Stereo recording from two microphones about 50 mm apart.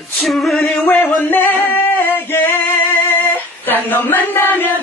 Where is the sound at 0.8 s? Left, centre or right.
Left.